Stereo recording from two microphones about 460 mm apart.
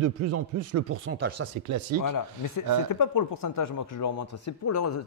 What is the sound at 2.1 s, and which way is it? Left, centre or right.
Speech, left.